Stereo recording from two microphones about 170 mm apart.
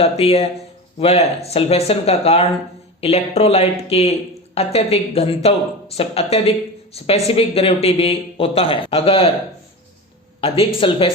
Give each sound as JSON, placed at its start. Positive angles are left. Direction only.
{"t": 0.0, "sound": "speech", "side_deg": 35}
{"t": 10.4, "sound": "speech", "side_deg": 35}